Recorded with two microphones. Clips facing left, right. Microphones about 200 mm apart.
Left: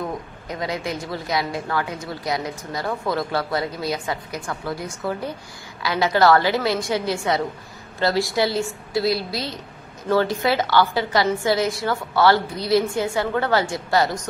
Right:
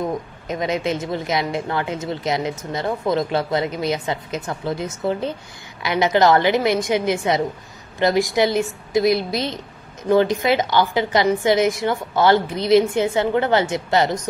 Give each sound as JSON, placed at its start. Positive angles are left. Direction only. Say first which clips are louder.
{"t": 0.5, "sound": "a woman's voice", "louder": "right 5 dB", "side_deg": -20}